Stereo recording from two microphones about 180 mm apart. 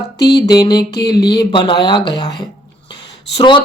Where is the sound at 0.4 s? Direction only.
20° left (ahead or behind).